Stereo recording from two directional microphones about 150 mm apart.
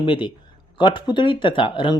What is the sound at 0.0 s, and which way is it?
A man's voice, 35° left (ahead or behind).